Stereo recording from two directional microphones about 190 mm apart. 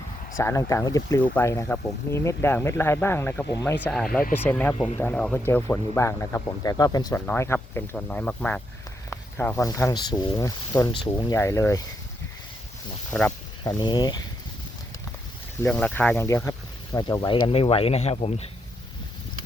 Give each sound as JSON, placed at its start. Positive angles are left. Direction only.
{"t": 0.3, "sound": "speech", "side_deg": 15}
{"t": 3.8, "sound": "speech", "side_deg": 5}
{"t": 13.1, "sound": "speech", "side_deg": 5}
{"t": 13.7, "sound": "speech", "side_deg": 20}
{"t": 15.6, "sound": "speech", "side_deg": 5}